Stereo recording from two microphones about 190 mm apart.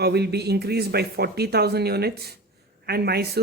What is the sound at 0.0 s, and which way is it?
Speech, 60° right (ahead or behind).